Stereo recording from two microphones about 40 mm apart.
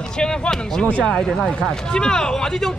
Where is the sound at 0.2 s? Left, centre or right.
Centre.